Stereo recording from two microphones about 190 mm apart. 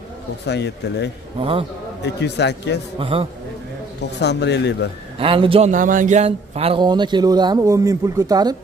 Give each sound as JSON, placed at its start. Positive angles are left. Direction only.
{"t": 0.5, "sound": "speech", "side_deg": 65}
{"t": 1.4, "sound": "a man's voice", "side_deg": -30}
{"t": 2.0, "sound": "speech", "side_deg": 65}
{"t": 3.0, "sound": "a man's voice", "side_deg": -30}
{"t": 4.2, "sound": "speech", "side_deg": 65}
{"t": 5.2, "sound": "a man's voice", "side_deg": -30}
{"t": 5.7, "sound": "a man's voice", "side_deg": -45}